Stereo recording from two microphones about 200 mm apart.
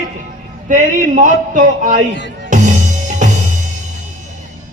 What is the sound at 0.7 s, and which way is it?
A man's voice, 40° right (ahead or behind).